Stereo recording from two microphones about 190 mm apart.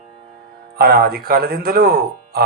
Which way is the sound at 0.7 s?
55° right (ahead or behind).